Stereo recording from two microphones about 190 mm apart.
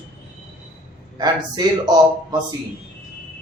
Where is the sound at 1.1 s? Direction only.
20° right (ahead or behind).